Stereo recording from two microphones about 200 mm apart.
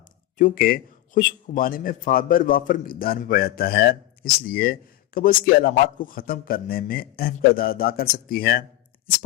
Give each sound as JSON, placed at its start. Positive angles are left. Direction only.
{"t": 0.3, "sound": "a man's voice", "side_deg": 45}